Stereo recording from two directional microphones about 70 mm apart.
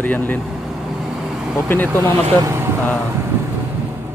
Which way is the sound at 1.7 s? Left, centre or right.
Left.